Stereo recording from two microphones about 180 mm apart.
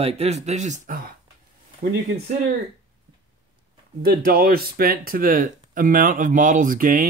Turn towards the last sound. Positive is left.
turn(degrees=-50)  # may be behind; listen again after turning